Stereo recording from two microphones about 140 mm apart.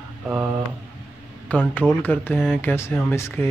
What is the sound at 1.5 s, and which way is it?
Speech, 10° left (ahead or behind).